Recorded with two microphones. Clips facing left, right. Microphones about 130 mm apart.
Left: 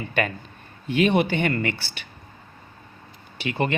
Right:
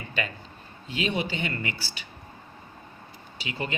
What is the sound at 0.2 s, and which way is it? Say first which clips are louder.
A man's voice: left 7 dB; 60° left (ahead or behind).